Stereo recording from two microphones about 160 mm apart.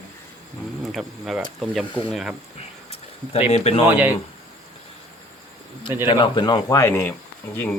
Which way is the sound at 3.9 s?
10° right (ahead or behind).